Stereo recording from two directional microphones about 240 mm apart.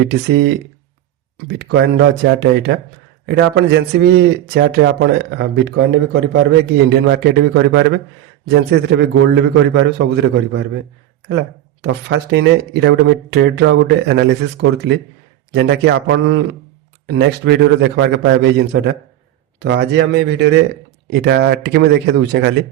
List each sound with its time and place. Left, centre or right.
0.1 s speech: right
11.8 s speech: right